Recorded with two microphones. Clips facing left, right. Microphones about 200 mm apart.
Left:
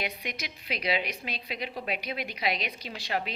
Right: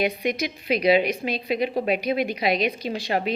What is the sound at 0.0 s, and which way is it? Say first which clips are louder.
A woman's voice: right 12 dB; 50° right (ahead or behind).